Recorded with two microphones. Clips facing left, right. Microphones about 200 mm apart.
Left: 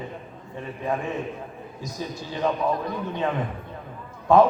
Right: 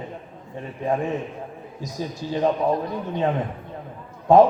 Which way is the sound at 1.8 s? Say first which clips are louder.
Right 3 dB; 40° right (ahead or behind).